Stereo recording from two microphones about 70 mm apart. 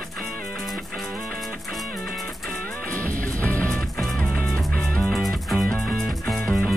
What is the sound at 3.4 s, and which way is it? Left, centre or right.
Music, centre.